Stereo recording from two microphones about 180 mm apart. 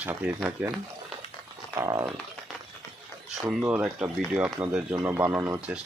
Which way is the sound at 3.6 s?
10° right (ahead or behind).